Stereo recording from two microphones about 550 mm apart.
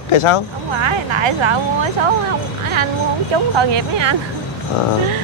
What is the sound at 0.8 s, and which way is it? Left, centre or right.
Speech, right.